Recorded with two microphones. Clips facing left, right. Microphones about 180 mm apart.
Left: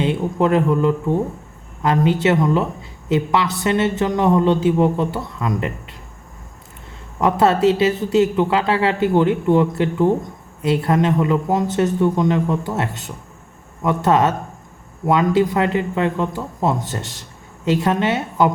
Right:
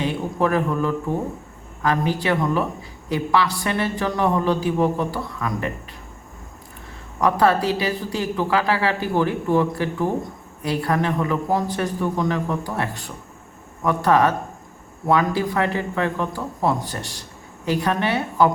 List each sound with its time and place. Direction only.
0.0 s speech: 25° left (ahead or behind)
7.2 s speech: 25° left (ahead or behind)